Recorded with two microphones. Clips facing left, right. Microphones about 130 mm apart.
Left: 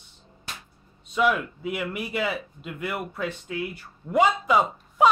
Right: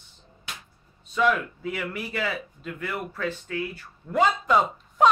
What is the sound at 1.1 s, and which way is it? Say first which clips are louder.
A woman's voice: even; 15° left (ahead or behind).